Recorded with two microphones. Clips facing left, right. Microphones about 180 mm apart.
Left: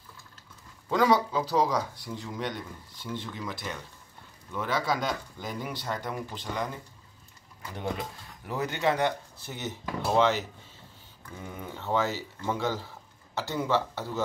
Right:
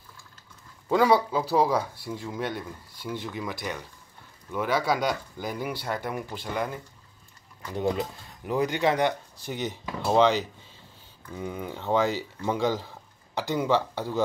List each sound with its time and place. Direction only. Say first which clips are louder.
0.8 s speech: right 3 dB; 10° right (ahead or behind)
8.5 s speech: right 4 dB; 15° right (ahead or behind)